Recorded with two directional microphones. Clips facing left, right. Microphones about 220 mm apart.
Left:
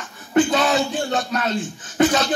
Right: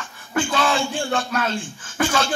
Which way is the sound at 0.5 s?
30° right (ahead or behind).